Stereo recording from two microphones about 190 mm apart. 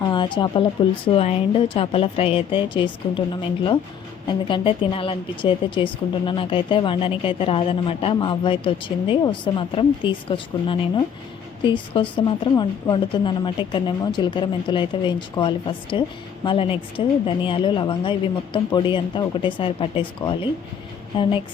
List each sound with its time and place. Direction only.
0.0 s a woman's voice: 25° left (ahead or behind)